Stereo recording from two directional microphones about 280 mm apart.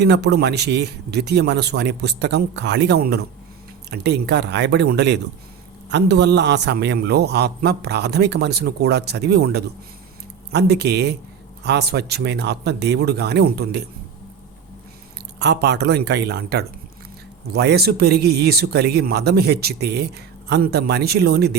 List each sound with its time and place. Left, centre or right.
0.0 s a man's voice: right
15.4 s a man's voice: right